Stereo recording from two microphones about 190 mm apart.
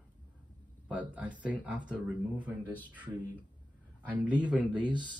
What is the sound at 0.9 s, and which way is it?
Speech, 5° right (ahead or behind).